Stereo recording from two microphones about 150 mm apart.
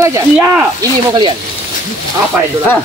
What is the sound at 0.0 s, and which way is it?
Speech, 15° right (ahead or behind).